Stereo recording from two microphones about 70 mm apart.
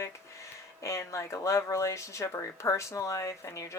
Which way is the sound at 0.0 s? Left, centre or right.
Left.